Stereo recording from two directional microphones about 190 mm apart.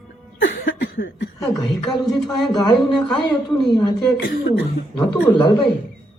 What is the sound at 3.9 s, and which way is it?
Speech, 5° left (ahead or behind).